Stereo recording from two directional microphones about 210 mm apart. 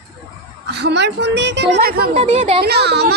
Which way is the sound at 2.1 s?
30° right (ahead or behind).